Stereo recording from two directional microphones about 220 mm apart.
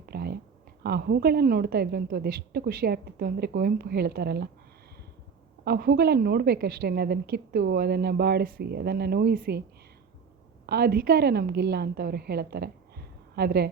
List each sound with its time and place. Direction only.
0.0 s a sound: 45° right (ahead or behind)
0.8 s a woman's voice: 45° right (ahead or behind)
5.6 s a woman's voice: 45° right (ahead or behind)
10.7 s a woman's voice: 45° right (ahead or behind)